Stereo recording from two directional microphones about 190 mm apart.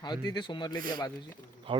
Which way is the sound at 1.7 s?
25° right (ahead or behind).